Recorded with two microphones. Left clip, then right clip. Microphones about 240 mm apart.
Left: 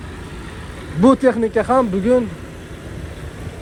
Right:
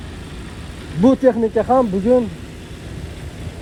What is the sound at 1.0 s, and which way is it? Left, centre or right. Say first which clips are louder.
Speech: even; left.